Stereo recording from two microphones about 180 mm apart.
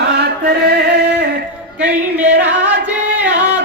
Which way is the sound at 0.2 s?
65° right (ahead or behind).